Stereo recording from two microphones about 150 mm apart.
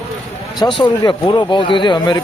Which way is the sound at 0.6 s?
30° left (ahead or behind).